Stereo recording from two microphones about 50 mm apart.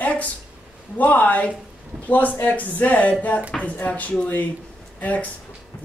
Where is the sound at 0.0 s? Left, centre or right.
Left.